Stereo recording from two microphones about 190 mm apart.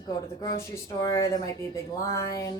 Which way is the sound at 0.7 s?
15° left (ahead or behind).